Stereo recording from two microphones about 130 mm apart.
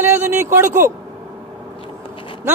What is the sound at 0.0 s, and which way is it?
Speech, 20° right (ahead or behind).